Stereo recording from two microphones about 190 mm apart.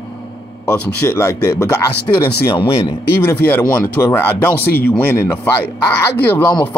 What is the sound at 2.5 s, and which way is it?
Speech, 25° left (ahead or behind).